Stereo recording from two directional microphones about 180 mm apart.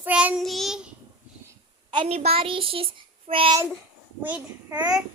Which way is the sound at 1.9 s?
35° right (ahead or behind).